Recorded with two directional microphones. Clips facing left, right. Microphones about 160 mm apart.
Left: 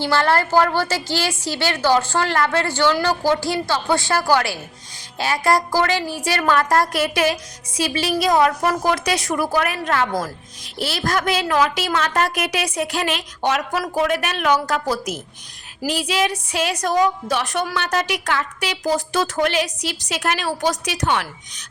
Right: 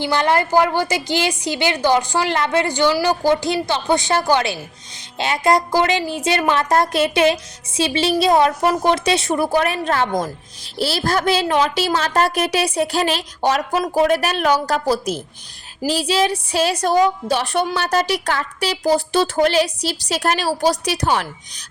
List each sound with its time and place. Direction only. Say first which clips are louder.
0.0 s a woman's voice: right 1 dB; 15° right (ahead or behind)
10.1 s a woman's voice: right 3 dB; 20° right (ahead or behind)
10.8 s a woman's voice: right 3 dB; 30° right (ahead or behind)